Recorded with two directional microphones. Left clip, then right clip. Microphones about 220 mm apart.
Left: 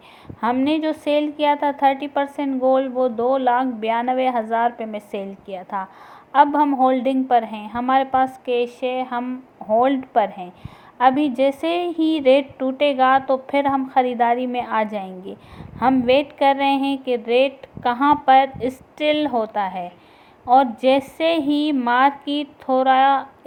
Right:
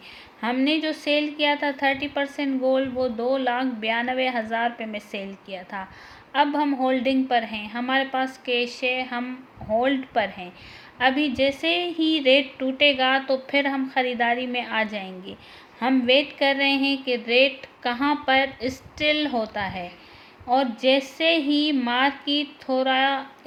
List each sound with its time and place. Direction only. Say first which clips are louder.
0.4 s a woman's voice: left 4 dB; 15° left (ahead or behind)
11.3 s speech: left 3 dB; 45° left (ahead or behind)
12.2 s a woman's voice: left 4 dB; 15° left (ahead or behind)